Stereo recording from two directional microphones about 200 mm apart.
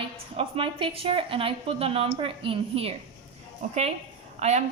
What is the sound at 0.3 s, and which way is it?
A woman's voice, 25° right (ahead or behind).